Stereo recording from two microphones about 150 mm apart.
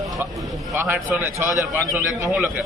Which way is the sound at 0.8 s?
15° right (ahead or behind).